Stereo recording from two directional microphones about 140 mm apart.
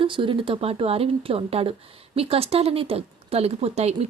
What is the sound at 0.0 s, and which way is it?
Speech, 35° right (ahead or behind).